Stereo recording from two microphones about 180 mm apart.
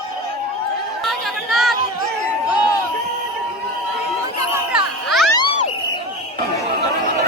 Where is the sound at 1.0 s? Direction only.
Centre (ahead or behind).